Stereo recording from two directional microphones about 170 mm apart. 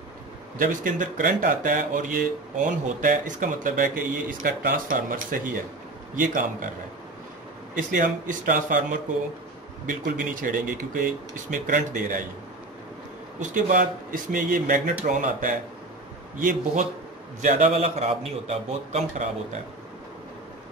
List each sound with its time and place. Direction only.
0.6 s speech: 50° right (ahead or behind)
7.7 s speech: 50° right (ahead or behind)
13.4 s speech: 50° right (ahead or behind)
17.4 s a man's voice: 40° right (ahead or behind)